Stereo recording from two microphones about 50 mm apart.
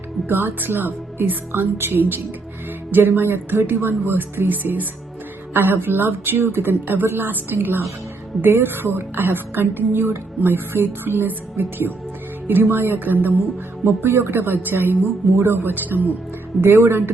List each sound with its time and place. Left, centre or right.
0.3 s a woman's voice: right
13.8 s a woman's voice: right